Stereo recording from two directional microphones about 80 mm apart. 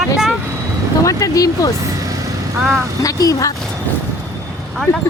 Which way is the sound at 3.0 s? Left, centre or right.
Left.